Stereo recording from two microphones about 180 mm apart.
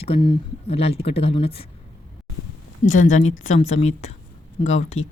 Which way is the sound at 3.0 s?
45° left (ahead or behind).